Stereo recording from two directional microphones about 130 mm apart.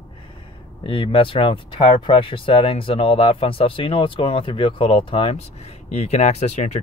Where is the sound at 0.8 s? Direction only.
40° left (ahead or behind).